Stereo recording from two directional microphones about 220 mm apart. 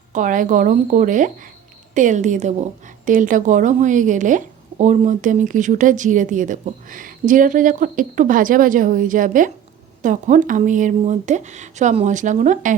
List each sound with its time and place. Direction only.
0.1 s speech: 35° right (ahead or behind)